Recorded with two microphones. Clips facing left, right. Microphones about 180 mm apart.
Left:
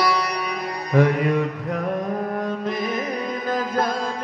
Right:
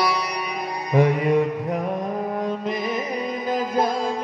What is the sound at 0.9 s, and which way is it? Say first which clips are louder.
Music: even; 15° right (ahead or behind).